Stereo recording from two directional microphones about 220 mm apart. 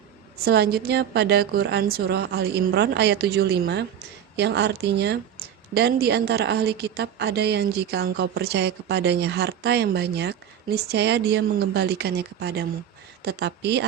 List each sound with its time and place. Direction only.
0.4 s a woman's voice: 45° right (ahead or behind)